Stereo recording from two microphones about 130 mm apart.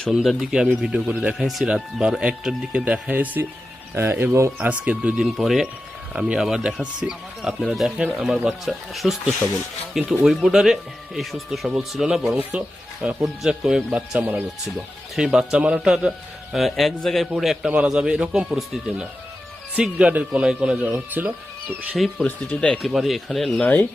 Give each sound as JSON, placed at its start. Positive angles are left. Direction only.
{"t": 0.0, "sound": "speech", "side_deg": 0}
{"t": 4.5, "sound": "speech", "side_deg": -10}
{"t": 21.9, "sound": "speech", "side_deg": 0}